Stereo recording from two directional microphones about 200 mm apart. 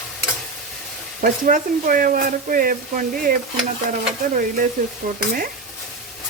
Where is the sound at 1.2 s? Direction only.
40° right (ahead or behind).